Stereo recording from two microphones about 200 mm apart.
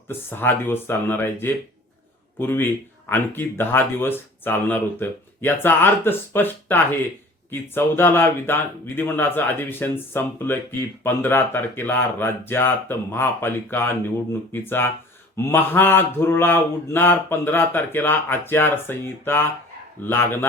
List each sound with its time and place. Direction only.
0.3 s speech: 10° left (ahead or behind)